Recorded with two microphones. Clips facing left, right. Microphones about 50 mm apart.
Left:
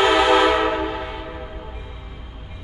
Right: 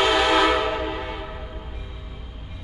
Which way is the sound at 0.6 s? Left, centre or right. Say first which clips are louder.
Left 4 dB; centre.